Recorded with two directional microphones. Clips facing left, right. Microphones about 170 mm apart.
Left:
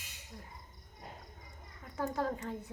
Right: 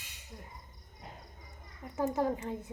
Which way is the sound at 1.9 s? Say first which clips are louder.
Right 4 dB; 20° right (ahead or behind).